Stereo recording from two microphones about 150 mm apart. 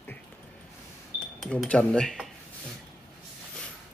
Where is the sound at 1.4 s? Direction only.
5° left (ahead or behind).